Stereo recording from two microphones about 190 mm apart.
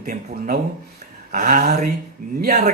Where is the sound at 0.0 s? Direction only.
50° right (ahead or behind).